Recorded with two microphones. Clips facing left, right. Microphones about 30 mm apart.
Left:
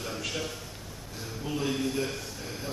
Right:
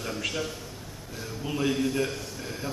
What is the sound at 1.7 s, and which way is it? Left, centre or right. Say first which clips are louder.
Speech: right 4 dB; centre.